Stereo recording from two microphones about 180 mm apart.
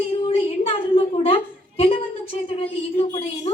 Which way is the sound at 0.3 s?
30° left (ahead or behind).